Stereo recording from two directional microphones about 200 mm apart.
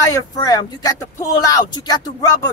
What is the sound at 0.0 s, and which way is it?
Speech, 15° left (ahead or behind).